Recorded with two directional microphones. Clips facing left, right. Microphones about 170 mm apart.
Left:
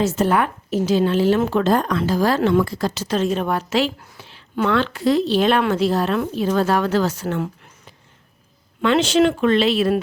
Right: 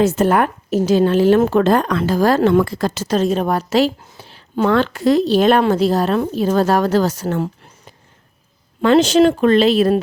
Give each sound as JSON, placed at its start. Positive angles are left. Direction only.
{"t": 0.0, "sound": "a woman's voice", "side_deg": -55}
{"t": 1.7, "sound": "a woman's voice", "side_deg": -70}